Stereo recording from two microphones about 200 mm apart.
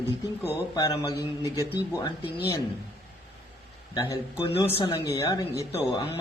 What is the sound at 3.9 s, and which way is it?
A man's voice, 20° left (ahead or behind).